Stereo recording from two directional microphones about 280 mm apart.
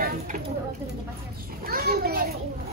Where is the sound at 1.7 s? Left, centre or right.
Right.